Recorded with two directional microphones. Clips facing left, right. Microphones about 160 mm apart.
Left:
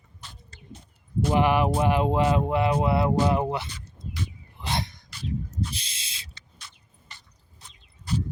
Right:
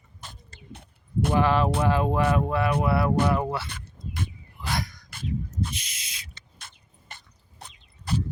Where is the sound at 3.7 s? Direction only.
50° right (ahead or behind).